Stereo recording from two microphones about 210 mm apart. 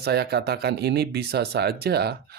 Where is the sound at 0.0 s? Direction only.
50° right (ahead or behind).